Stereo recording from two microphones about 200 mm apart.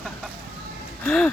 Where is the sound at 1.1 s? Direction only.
5° left (ahead or behind).